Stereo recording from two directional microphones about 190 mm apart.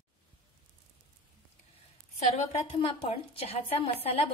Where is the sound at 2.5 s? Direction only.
35° left (ahead or behind).